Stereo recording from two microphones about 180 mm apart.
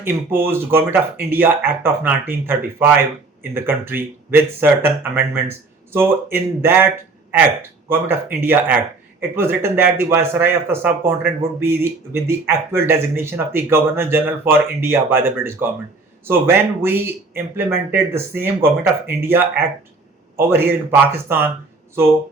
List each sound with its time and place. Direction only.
0.0 s speech: 10° right (ahead or behind)
20.3 s speech: 10° right (ahead or behind)